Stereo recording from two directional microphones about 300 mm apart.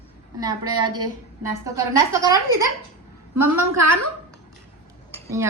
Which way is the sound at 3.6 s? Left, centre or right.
Right.